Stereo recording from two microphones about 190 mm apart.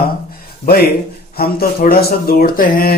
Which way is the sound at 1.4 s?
50° left (ahead or behind).